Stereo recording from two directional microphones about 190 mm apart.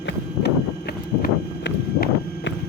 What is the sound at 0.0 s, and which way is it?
Horse, 60° left (ahead or behind).